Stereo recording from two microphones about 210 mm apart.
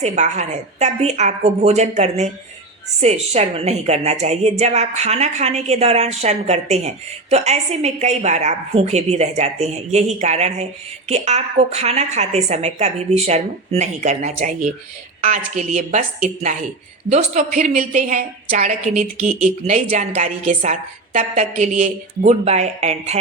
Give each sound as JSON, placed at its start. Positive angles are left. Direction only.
{"t": 0.0, "sound": "a woman's voice", "side_deg": -35}